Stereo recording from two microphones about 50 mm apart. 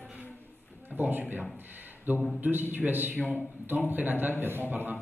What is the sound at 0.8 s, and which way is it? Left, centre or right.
A woman's voice, right.